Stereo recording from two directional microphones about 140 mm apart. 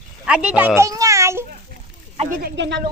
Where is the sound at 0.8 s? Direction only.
25° right (ahead or behind).